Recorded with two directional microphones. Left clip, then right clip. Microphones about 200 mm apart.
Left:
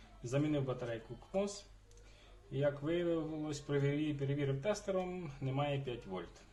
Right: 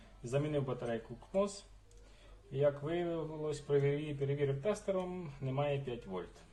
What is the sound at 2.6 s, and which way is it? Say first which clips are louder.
Speech: right 2 dB; 20° left (ahead or behind).